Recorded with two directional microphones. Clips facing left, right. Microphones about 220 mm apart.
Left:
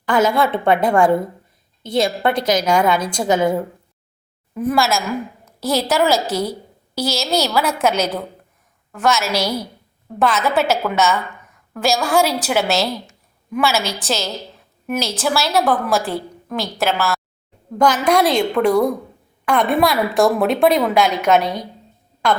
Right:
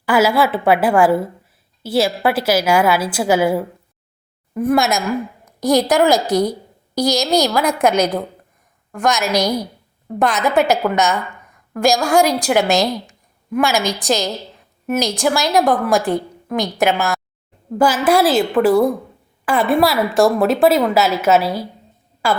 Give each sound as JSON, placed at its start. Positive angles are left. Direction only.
{"t": 0.0, "sound": "a woman's voice", "side_deg": -10}
{"t": 4.6, "sound": "a woman's voice", "side_deg": -20}
{"t": 17.7, "sound": "a woman's voice", "side_deg": -5}